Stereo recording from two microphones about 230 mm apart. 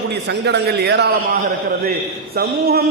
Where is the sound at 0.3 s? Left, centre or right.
Right.